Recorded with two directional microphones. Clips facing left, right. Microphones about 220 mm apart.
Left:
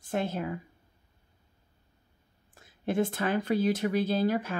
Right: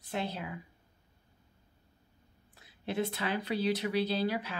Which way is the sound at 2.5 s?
45° left (ahead or behind).